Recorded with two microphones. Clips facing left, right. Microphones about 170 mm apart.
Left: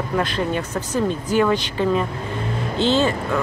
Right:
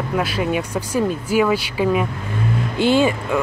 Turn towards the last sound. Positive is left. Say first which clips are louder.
# right 2 dB
turn(degrees=-10)  # may be behind; listen again after turning